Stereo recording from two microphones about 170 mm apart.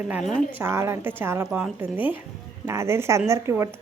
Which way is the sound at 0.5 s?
15° right (ahead or behind).